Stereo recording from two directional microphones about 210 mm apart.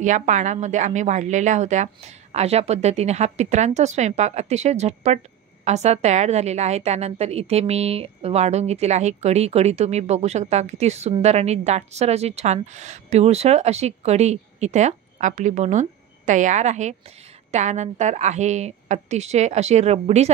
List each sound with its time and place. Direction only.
0.0 s a woman's voice: 35° right (ahead or behind)